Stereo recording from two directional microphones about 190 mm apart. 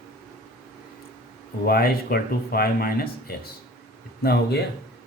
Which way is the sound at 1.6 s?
55° left (ahead or behind).